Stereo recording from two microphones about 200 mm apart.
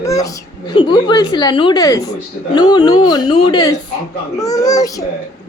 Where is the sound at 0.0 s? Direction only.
15° left (ahead or behind).